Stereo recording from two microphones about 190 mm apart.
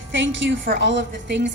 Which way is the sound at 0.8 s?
70° right (ahead or behind).